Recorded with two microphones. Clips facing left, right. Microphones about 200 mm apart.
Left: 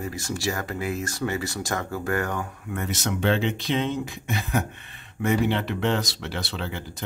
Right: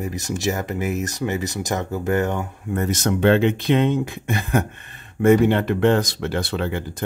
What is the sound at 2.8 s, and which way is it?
Speech, 45° right (ahead or behind).